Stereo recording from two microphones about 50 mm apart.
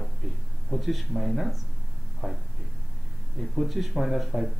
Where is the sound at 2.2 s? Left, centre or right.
Centre.